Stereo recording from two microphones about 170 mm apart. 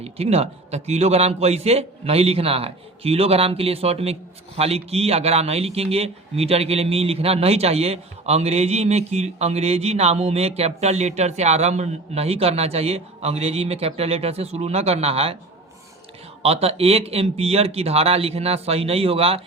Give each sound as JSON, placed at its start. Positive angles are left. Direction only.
{"t": 0.0, "sound": "a man's voice", "side_deg": -35}
{"t": 16.4, "sound": "a man's voice", "side_deg": -35}